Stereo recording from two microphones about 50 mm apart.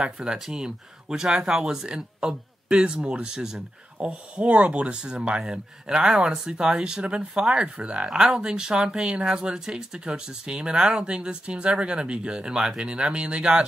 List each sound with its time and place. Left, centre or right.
0.0 s speech: centre
4.1 s speech: right